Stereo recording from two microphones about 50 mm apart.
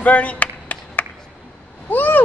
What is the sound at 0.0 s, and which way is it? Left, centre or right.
Clapping, left.